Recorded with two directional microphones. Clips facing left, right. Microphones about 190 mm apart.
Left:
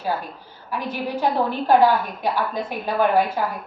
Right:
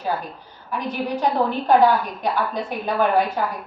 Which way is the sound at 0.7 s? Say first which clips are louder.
Right 1 dB; 5° left (ahead or behind).